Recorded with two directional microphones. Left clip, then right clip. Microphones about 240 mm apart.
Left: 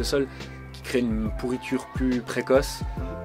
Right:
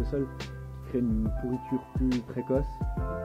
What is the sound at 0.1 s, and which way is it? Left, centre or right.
Speech, centre.